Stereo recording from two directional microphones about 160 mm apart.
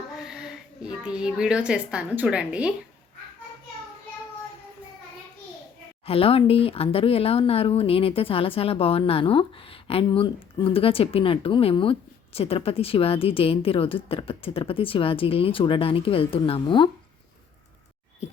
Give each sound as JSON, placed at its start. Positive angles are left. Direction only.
{"t": 0.3, "sound": "a woman's voice", "side_deg": -5}
{"t": 6.1, "sound": "speech", "side_deg": 35}